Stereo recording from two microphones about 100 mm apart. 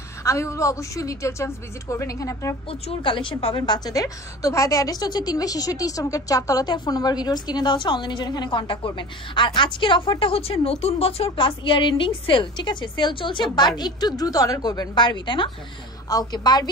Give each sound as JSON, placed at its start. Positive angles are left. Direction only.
{"t": 0.2, "sound": "a woman's voice", "side_deg": 30}
{"t": 2.7, "sound": "a woman's voice", "side_deg": 65}
{"t": 3.6, "sound": "a woman's voice", "side_deg": 45}